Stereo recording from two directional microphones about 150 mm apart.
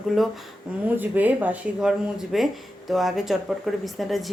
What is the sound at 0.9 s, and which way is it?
A woman's voice, 10° right (ahead or behind).